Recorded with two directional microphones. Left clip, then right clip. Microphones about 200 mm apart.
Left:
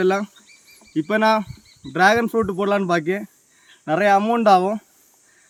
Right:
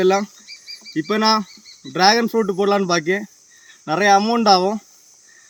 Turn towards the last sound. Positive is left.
turn(degrees=15)  # may be behind; listen again after turning